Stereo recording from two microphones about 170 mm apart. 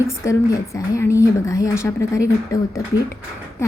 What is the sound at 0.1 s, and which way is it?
A woman's voice, 20° left (ahead or behind).